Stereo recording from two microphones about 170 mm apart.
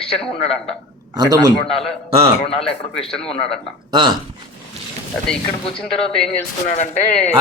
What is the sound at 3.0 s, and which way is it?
Speech, 35° left (ahead or behind).